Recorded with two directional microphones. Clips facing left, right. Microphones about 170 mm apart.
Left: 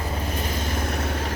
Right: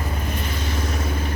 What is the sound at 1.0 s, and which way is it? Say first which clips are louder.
Vehicle: right 1 dB; 80° left.